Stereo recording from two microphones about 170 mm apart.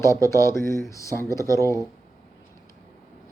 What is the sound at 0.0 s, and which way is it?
Speech, 15° left (ahead or behind).